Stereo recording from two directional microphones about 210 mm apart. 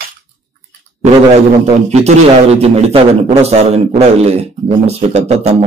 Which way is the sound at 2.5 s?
30° right (ahead or behind).